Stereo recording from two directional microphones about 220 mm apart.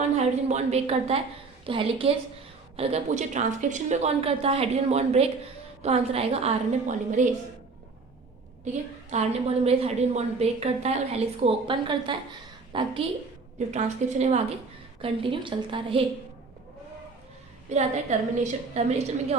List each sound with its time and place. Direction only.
0.2 s a woman's voice: 30° right (ahead or behind)
8.6 s a woman's voice: 30° right (ahead or behind)
13.7 s a woman's voice: 30° right (ahead or behind)
17.7 s a woman's voice: 30° right (ahead or behind)